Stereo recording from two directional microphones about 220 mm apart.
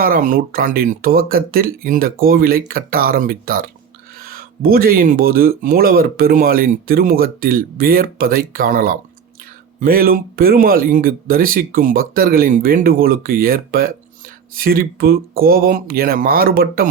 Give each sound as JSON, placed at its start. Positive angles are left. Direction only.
{"t": 0.0, "sound": "speech", "side_deg": -40}